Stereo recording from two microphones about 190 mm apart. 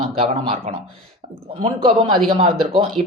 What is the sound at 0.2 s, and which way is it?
Speech, 30° right (ahead or behind).